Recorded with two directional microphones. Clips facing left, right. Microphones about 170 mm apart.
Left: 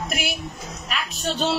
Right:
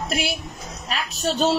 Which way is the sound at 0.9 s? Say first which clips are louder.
Right 3 dB; 40° right (ahead or behind).